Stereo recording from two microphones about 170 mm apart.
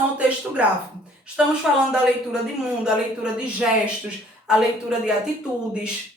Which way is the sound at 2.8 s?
5° right (ahead or behind).